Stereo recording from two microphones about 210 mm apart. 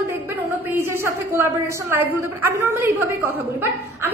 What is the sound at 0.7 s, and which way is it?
A woman's voice, 10° right (ahead or behind).